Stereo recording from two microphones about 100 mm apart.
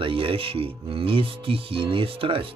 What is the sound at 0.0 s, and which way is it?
Speech, 65° right (ahead or behind).